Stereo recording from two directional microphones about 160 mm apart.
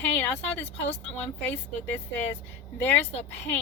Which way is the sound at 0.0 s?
10° left (ahead or behind).